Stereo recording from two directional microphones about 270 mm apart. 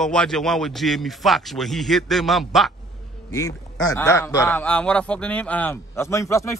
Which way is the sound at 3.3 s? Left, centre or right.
Centre.